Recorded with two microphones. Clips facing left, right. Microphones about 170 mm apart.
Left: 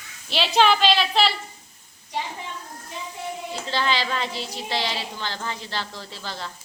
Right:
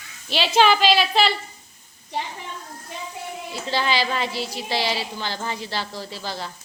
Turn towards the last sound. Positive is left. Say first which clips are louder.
# right 3 dB
turn(degrees=-10)  # may be behind; listen again after turning